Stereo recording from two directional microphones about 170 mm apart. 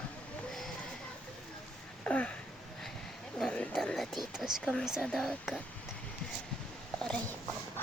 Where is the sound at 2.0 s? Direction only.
5° left (ahead or behind).